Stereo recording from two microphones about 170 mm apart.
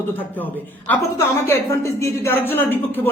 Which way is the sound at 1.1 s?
15° left (ahead or behind).